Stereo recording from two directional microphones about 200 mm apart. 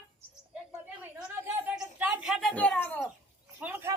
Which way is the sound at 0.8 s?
5° right (ahead or behind).